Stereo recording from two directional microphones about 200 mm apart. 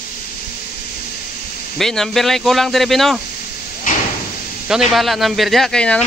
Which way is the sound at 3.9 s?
45° left (ahead or behind).